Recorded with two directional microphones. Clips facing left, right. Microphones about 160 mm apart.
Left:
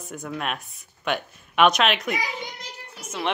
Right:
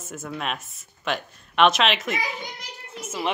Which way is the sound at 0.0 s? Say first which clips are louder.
Left 1 dB; centre (ahead or behind).